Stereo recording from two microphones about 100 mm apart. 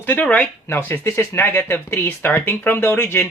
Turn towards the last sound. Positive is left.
turn(degrees=20)  # may be behind; listen again after turning